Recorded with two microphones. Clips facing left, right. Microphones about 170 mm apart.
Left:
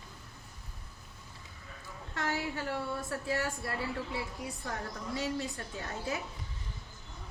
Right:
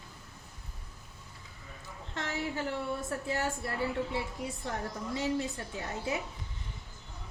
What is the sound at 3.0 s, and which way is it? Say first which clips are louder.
Speech: right 1 dB; 25° right (ahead or behind).